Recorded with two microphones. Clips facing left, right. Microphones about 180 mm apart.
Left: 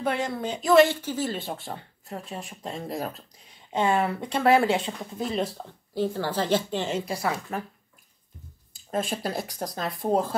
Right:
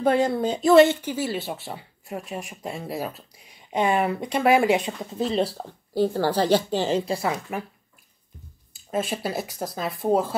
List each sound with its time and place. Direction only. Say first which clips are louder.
0.0 s speech: right 7 dB; 30° right (ahead or behind)
0.8 s speech: right 3 dB; 15° right (ahead or behind)
5.2 s speech: right 4 dB; 30° right (ahead or behind)
8.7 s speech: right 2 dB; 5° right (ahead or behind)